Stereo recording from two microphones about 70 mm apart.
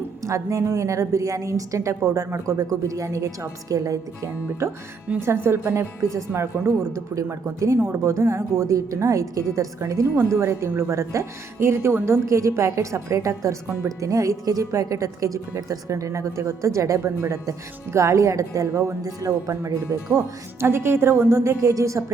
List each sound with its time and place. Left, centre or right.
0.2 s a woman's voice: right
5.2 s a woman's voice: right
20.6 s a woman's voice: right